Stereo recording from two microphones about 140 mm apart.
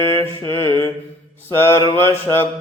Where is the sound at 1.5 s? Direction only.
20° left (ahead or behind).